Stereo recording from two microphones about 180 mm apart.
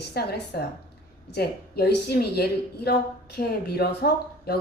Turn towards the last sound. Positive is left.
turn(degrees=60)  # may be behind; listen again after turning